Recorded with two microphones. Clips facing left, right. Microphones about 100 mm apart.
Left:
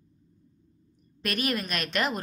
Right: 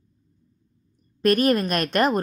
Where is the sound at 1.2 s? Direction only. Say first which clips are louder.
Right 11 dB; 45° right (ahead or behind).